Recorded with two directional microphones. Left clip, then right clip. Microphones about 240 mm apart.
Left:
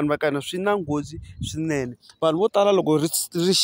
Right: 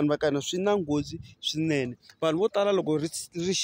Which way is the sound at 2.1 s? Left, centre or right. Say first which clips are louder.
Left 6 dB; left.